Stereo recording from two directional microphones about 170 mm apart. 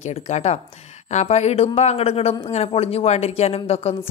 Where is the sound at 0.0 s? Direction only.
40° left (ahead or behind).